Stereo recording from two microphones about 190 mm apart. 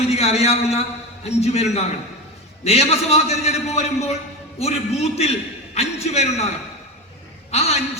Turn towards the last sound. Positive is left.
turn(degrees=35)  # may be behind; listen again after turning